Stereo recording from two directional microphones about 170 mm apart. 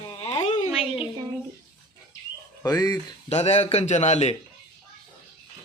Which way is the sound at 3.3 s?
40° left (ahead or behind).